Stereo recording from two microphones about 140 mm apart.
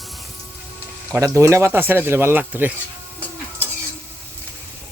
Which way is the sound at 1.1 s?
20° right (ahead or behind).